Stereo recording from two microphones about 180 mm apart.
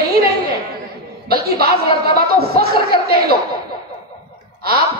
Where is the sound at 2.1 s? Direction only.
60° right (ahead or behind).